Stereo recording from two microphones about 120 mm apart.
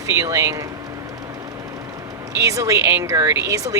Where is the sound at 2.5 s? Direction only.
25° right (ahead or behind).